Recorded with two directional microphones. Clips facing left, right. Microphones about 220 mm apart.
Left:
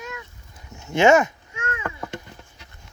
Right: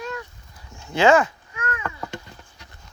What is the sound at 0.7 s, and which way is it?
Babbling, 20° left (ahead or behind).